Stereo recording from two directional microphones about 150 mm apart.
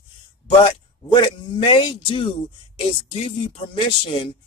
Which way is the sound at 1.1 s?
30° left (ahead or behind).